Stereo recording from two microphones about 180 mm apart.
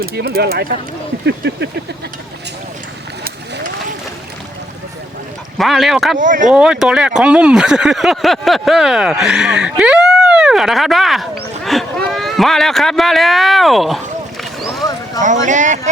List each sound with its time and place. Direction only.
0.0 s speech: 60° right (ahead or behind)
1.2 s a sound: 75° right (ahead or behind)
5.5 s speech: centre (ahead or behind)
6.1 s speech: 45° right (ahead or behind)
6.5 s speech: 5° right (ahead or behind)
15.2 s speech: 45° right (ahead or behind)